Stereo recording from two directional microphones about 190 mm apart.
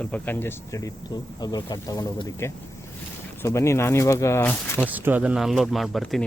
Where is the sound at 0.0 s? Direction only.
10° left (ahead or behind).